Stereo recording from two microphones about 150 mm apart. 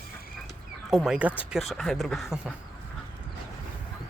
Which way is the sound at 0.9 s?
5° right (ahead or behind).